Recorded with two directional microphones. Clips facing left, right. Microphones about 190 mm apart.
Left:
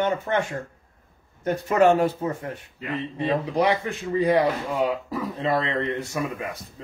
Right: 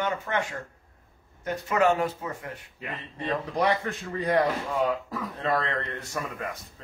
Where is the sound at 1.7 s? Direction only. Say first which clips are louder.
Left 5 dB; 30° left (ahead or behind).